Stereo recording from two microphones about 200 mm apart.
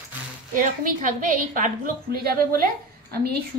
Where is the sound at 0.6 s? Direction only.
40° right (ahead or behind).